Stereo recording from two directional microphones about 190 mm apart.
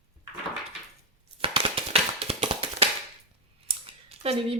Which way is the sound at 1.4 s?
30° right (ahead or behind).